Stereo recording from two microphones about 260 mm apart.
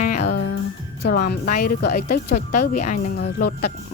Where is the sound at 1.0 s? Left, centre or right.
Left.